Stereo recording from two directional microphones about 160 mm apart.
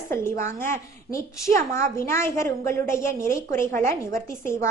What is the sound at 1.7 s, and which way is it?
A woman's voice, 15° left (ahead or behind).